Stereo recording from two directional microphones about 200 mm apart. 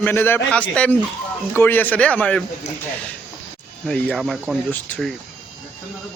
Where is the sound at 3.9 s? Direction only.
Centre (ahead or behind).